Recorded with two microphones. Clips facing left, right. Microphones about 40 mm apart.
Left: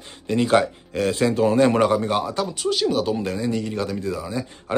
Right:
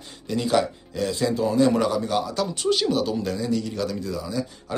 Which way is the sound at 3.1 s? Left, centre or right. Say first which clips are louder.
Left 1 dB; left.